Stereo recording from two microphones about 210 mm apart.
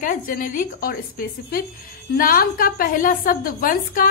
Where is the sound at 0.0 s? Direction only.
40° left (ahead or behind).